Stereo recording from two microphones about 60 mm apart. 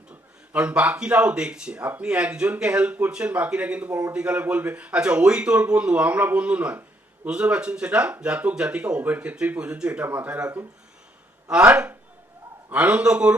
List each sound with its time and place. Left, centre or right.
0.5 s speech: centre
11.6 s speech: right